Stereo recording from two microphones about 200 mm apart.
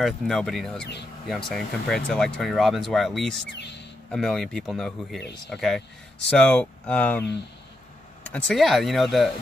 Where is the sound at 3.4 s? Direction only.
60° left (ahead or behind).